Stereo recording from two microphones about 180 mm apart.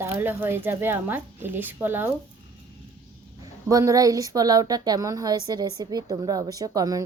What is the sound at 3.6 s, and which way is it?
Speech, 20° right (ahead or behind).